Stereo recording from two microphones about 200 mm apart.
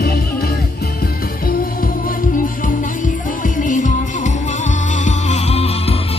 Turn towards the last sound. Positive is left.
turn(degrees=30)  # may be behind; listen again after turning